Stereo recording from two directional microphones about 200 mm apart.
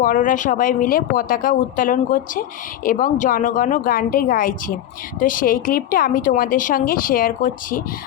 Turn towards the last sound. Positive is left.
turn(degrees=45)  # may be behind; listen again after turning